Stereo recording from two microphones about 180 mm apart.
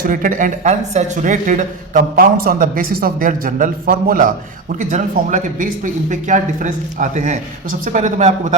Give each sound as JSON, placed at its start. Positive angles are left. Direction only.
{"t": 0.0, "sound": "speech", "side_deg": -50}